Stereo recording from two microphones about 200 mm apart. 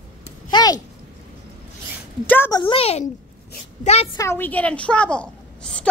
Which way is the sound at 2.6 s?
30° left (ahead or behind).